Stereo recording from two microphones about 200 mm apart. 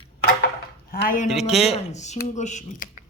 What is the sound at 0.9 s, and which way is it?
Speech, 45° left (ahead or behind).